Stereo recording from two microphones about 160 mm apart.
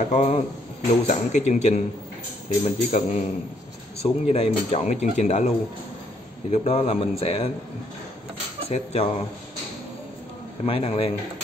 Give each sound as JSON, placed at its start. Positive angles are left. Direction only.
{"t": 0.1, "sound": "speech", "side_deg": 40}
{"t": 6.5, "sound": "speech", "side_deg": 45}
{"t": 8.6, "sound": "speech", "side_deg": 40}
{"t": 10.6, "sound": "speech", "side_deg": 40}